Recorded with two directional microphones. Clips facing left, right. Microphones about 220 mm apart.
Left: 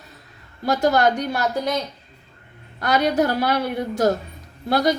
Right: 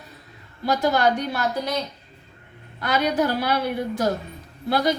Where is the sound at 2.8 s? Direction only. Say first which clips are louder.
Left 3 dB; 45° left (ahead or behind).